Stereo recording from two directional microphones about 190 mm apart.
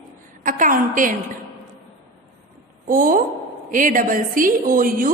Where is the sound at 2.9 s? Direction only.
45° right (ahead or behind).